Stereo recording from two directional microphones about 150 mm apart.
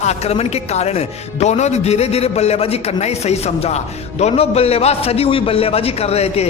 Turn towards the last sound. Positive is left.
turn(degrees=45)  # may be behind; listen again after turning